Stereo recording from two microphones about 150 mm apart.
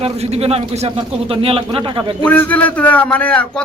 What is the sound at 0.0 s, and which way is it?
Speech, 45° right (ahead or behind).